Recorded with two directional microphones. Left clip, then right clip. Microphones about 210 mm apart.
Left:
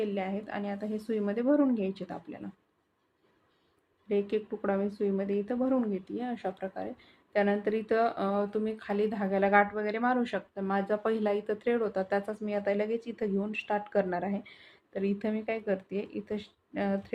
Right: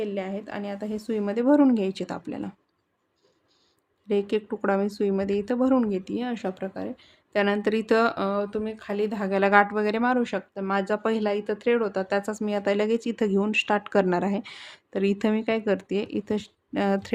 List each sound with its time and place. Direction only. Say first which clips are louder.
0.0 s a woman's voice: right 3 dB; 25° right (ahead or behind); by 2.5 s 40° right (ahead or behind)
4.1 s speech: right 5 dB; 45° right (ahead or behind)